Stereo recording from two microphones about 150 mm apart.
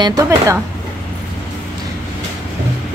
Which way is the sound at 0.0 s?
25° right (ahead or behind).